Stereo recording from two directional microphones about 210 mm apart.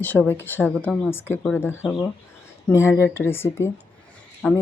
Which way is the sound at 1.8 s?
Centre (ahead or behind).